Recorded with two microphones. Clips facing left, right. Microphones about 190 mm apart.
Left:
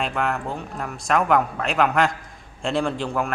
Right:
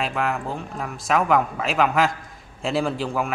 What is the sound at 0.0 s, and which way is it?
A man's voice, centre (ahead or behind).